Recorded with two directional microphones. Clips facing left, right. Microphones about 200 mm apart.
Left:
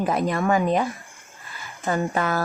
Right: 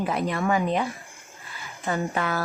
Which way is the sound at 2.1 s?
40° left (ahead or behind).